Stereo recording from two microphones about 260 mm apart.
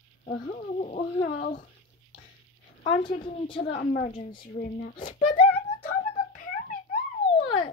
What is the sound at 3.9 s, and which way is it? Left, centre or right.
Speech, left.